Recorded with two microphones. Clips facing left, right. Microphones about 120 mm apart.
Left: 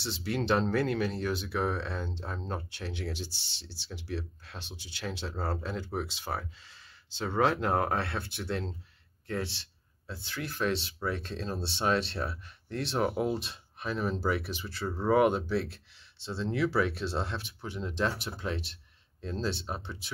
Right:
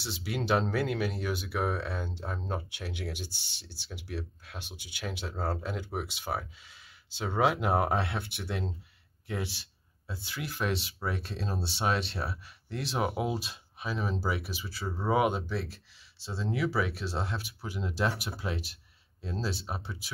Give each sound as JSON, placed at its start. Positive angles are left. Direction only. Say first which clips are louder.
{"t": 0.0, "sound": "speech", "louder": "left 2 dB", "side_deg": 0}
{"t": 3.3, "sound": "speech", "louder": "left 1 dB", "side_deg": -50}
{"t": 3.7, "sound": "speech", "louder": "left 2 dB", "side_deg": -5}
{"t": 8.5, "sound": "speech", "louder": "left 2 dB", "side_deg": -5}
{"t": 9.3, "sound": "a sound", "louder": "left 1 dB", "side_deg": -10}
{"t": 10.2, "sound": "speech", "louder": "left 2 dB", "side_deg": -10}